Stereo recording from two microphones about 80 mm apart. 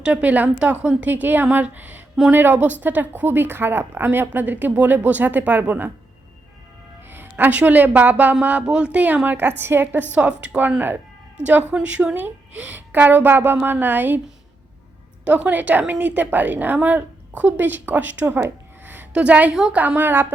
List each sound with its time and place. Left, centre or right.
0.0 s a woman's voice: centre
7.1 s a woman's voice: right
15.2 s a woman's voice: centre
19.8 s a woman's voice: right